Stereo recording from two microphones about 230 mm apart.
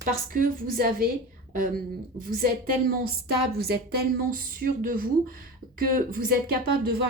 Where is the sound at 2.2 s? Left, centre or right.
Right.